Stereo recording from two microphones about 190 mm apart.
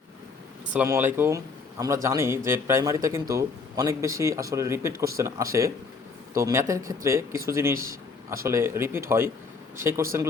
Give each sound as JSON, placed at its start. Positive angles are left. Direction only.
{"t": 0.7, "sound": "speech", "side_deg": -10}
{"t": 8.4, "sound": "speech", "side_deg": -15}